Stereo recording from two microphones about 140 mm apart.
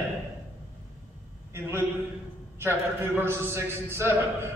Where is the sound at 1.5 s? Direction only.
15° right (ahead or behind).